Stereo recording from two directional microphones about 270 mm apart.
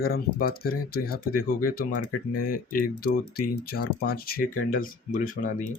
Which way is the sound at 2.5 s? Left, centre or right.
Left.